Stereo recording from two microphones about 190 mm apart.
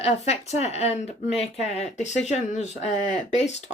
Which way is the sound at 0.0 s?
35° left (ahead or behind).